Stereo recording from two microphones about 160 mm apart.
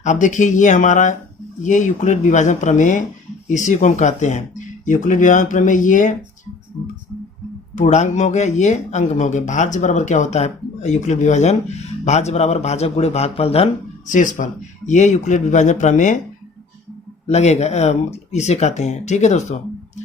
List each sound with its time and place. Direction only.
0.0 s speech: 50° left (ahead or behind)
7.8 s speech: 45° left (ahead or behind)
14.1 s speech: 55° left (ahead or behind)
17.2 s speech: 45° left (ahead or behind)